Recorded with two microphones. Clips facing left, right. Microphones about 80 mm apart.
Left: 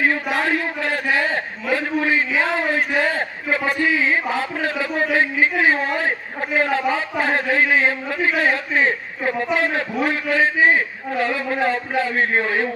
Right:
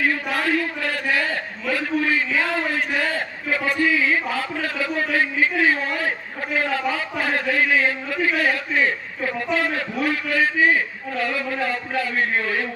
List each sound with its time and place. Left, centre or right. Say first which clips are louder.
0.3 s speech: left 1 dB; left
1.1 s a sound: left 3 dB; left
9.6 s a man's voice: left 3 dB; left